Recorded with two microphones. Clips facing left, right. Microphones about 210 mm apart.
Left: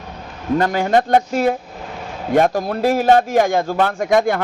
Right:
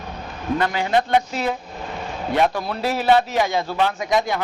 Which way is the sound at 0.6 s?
45° left (ahead or behind).